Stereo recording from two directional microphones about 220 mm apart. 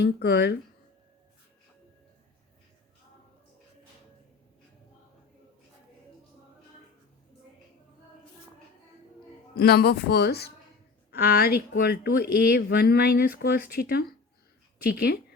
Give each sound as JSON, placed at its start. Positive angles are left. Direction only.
{"t": 0.0, "sound": "speech", "side_deg": 50}
{"t": 9.6, "sound": "speech", "side_deg": 45}